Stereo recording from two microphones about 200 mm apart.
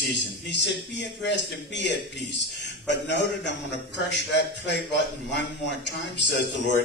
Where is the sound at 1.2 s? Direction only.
60° left (ahead or behind).